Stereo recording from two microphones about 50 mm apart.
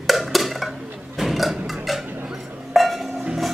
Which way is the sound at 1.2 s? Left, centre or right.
Centre.